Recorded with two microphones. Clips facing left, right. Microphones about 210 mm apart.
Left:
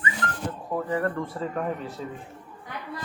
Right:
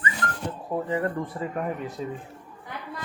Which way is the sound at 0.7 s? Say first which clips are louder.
Even; 20° right (ahead or behind).